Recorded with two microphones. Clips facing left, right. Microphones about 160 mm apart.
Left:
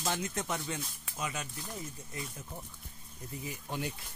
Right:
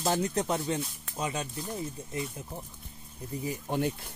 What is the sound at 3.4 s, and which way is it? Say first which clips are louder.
Speech: right 8 dB; 45° right (ahead or behind).